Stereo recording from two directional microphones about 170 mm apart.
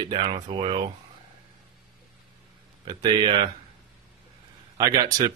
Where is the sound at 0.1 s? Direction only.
30° right (ahead or behind).